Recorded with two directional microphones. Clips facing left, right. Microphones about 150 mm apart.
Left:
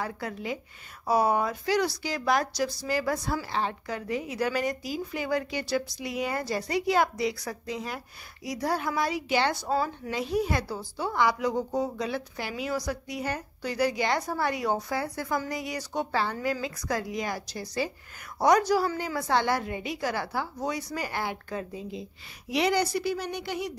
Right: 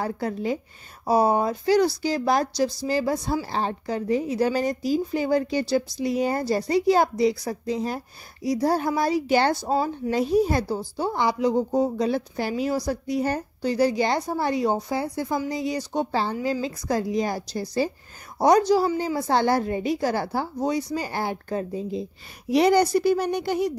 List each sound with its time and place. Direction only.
0.0 s a woman's voice: 35° right (ahead or behind)
9.5 s a woman's voice: 30° right (ahead or behind)